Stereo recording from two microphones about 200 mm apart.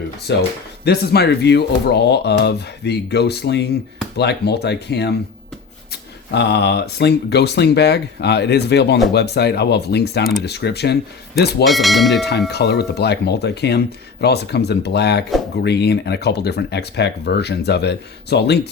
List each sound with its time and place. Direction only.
0.3 s speech: 60° left (ahead or behind)
11.6 s speech: centre (ahead or behind)
12.5 s speech: 55° left (ahead or behind)